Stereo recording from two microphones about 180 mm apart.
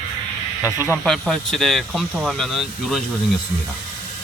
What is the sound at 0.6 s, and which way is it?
Speech, 15° left (ahead or behind).